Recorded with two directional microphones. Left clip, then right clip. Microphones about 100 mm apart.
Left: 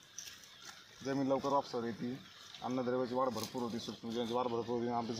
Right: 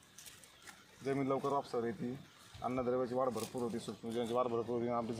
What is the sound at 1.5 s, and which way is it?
Speech, 40° right (ahead or behind).